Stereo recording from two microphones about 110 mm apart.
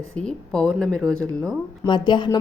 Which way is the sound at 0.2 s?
5° left (ahead or behind).